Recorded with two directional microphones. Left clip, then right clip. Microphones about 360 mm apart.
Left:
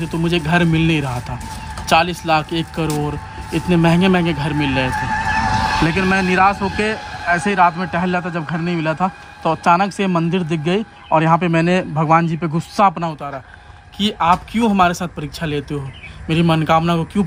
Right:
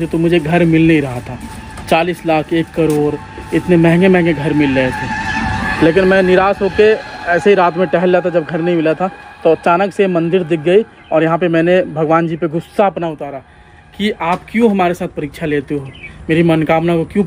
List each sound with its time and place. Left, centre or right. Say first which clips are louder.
0.0 s a man's voice: right 6 dB; centre
5.9 s a man's voice: right 7 dB; centre
14.2 s a man's voice: right 1 dB; centre